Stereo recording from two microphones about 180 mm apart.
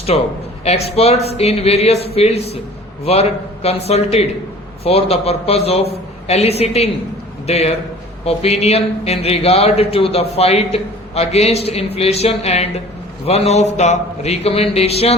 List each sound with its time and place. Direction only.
0.1 s speech: 35° left (ahead or behind)